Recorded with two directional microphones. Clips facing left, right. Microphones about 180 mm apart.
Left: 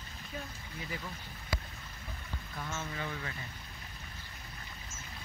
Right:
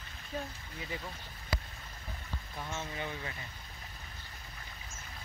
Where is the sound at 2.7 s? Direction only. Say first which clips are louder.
Even; 20° right (ahead or behind).